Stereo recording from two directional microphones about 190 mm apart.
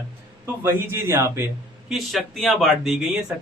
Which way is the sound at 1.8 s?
Centre (ahead or behind).